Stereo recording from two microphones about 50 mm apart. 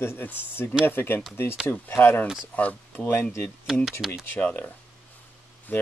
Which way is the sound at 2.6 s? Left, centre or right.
Left.